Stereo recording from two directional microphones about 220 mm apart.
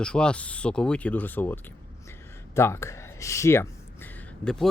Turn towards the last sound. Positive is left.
turn(degrees=5)  # may be behind; listen again after turning